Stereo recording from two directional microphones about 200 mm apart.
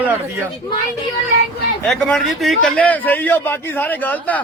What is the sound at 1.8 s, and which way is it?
A man's voice, centre (ahead or behind).